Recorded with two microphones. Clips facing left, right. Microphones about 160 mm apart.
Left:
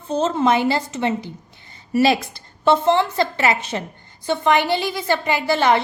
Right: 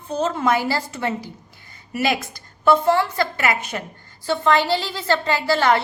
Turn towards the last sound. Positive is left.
turn(degrees=20)  # may be behind; listen again after turning